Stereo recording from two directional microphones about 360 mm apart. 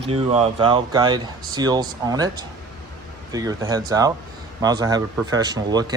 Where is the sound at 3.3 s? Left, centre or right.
Centre.